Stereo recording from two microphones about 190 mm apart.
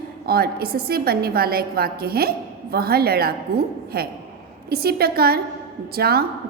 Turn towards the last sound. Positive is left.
turn(degrees=-55)  # may be behind; listen again after turning